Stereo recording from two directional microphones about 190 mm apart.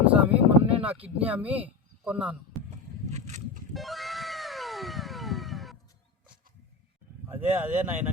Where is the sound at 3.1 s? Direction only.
35° right (ahead or behind).